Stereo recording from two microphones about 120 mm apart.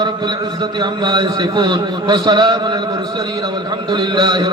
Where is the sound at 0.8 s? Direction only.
35° right (ahead or behind).